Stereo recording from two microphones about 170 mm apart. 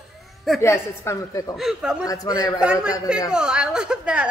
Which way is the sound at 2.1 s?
20° left (ahead or behind).